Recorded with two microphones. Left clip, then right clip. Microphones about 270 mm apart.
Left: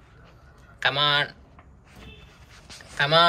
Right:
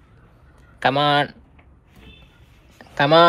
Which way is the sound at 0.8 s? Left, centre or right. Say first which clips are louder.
Right 4 dB; centre.